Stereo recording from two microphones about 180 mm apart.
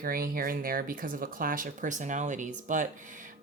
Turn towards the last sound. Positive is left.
turn(degrees=-45)  # may be behind; listen again after turning